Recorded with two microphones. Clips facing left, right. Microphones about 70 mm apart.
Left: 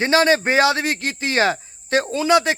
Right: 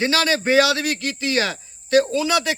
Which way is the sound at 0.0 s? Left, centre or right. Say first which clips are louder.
Left 4 dB; left.